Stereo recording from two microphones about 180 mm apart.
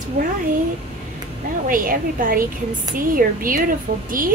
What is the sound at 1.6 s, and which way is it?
A woman's voice, 50° right (ahead or behind).